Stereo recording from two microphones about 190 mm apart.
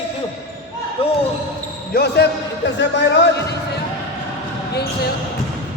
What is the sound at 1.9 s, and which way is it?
Speech, 55° left (ahead or behind).